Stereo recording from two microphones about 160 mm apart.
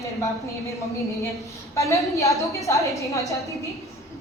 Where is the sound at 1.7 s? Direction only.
20° left (ahead or behind).